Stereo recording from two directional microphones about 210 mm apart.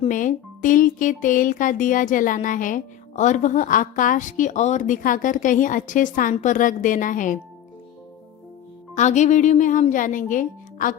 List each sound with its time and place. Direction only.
0.0 s speech: 40° left (ahead or behind)
9.0 s speech: 35° left (ahead or behind)